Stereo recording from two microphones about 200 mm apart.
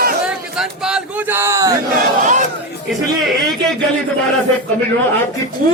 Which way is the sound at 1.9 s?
40° right (ahead or behind).